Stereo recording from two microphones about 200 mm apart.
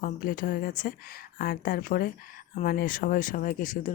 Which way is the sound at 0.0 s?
45° left (ahead or behind).